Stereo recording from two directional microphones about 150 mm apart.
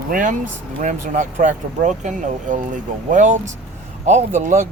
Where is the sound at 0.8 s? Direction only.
55° right (ahead or behind).